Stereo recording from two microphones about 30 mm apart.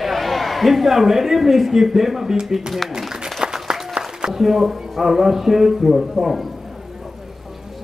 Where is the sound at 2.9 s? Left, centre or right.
Centre.